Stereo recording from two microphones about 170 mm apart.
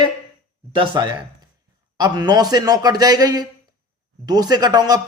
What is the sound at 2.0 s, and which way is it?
Speech, 25° right (ahead or behind).